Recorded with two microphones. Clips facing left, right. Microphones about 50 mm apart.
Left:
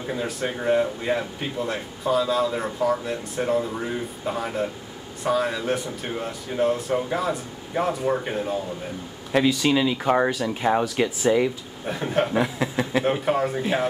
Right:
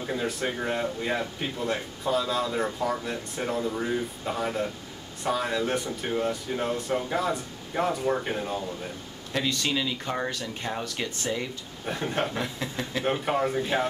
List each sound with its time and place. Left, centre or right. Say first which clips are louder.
0.0 s a man's voice: left 2 dB; centre
9.8 s a man's voice: left 9 dB; centre